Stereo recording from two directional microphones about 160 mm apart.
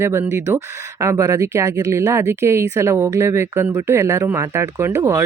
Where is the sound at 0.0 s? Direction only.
15° right (ahead or behind).